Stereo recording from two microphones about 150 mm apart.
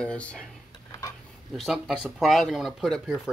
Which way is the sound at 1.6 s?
Centre (ahead or behind).